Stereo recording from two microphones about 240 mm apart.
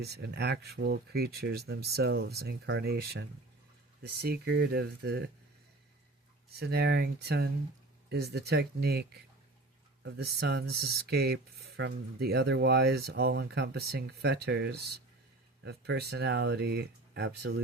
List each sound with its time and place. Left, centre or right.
0.0 s speech: right
6.6 s speech: right